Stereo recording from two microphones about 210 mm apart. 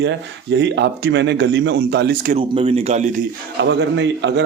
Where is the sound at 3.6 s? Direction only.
55° right (ahead or behind).